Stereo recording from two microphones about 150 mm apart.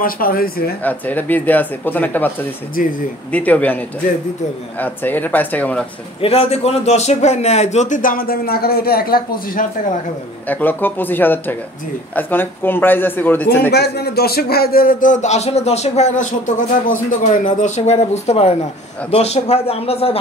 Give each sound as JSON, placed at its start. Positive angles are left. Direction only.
{"t": 0.0, "sound": "speech", "side_deg": 75}
{"t": 0.8, "sound": "a man's voice", "side_deg": 10}
{"t": 2.8, "sound": "speech", "side_deg": 65}
{"t": 3.3, "sound": "a man's voice", "side_deg": 10}
{"t": 6.2, "sound": "speech", "side_deg": 40}
{"t": 10.5, "sound": "a man's voice", "side_deg": 10}
{"t": 13.7, "sound": "speech", "side_deg": 90}